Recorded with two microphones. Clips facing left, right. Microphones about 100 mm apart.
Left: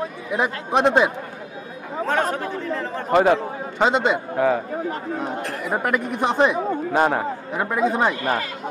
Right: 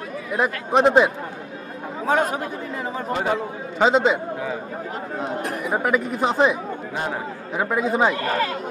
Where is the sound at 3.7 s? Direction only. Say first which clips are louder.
Right 2 dB; centre (ahead or behind).